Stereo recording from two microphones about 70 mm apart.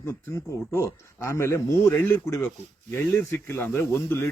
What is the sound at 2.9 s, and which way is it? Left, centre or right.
Speech, left.